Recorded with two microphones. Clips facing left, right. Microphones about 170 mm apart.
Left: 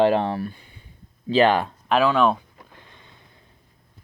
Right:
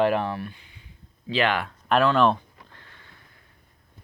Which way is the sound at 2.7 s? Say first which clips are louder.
Left 3 dB; 20° left (ahead or behind).